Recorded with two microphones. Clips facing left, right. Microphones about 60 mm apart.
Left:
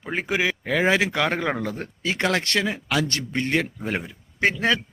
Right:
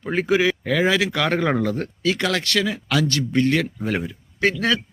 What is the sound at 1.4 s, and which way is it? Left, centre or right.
Speech, centre.